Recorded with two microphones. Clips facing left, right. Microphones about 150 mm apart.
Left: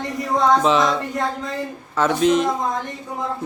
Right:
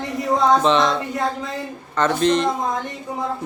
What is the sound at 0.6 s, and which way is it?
A man's voice, 5° left (ahead or behind).